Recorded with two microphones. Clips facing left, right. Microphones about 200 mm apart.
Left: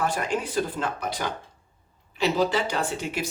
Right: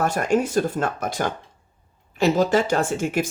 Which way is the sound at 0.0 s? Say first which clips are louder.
Right 6 dB; 45° right (ahead or behind).